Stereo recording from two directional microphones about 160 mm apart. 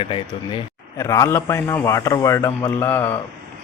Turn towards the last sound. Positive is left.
turn(degrees=15)  # may be behind; listen again after turning